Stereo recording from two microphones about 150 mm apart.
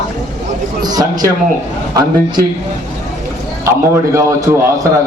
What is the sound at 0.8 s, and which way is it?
Speech, 25° right (ahead or behind).